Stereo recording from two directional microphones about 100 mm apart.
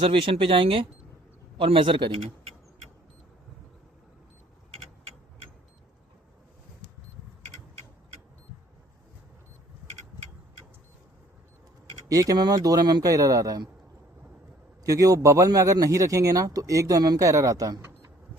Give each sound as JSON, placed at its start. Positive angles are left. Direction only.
{"t": 0.0, "sound": "speech", "side_deg": -60}
{"t": 12.0, "sound": "a man's voice", "side_deg": -35}
{"t": 14.8, "sound": "a man's voice", "side_deg": -35}